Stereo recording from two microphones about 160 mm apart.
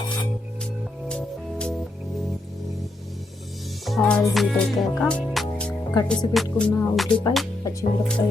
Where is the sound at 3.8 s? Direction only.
5° left (ahead or behind).